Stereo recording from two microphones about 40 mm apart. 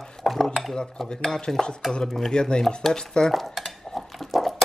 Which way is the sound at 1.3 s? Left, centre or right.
Centre.